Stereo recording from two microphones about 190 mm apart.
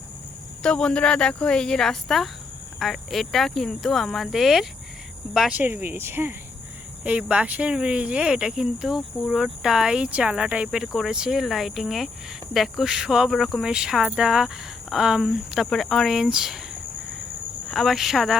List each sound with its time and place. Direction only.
0.6 s speech: 5° left (ahead or behind)
17.7 s speech: centre (ahead or behind)